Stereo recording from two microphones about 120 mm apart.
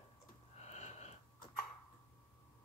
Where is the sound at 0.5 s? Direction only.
70° left (ahead or behind).